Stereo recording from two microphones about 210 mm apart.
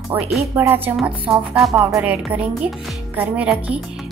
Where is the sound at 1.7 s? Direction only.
15° right (ahead or behind).